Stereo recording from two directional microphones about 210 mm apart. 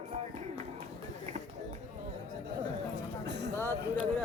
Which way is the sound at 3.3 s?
55° right (ahead or behind).